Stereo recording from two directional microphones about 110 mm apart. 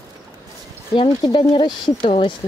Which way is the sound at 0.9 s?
45° left (ahead or behind).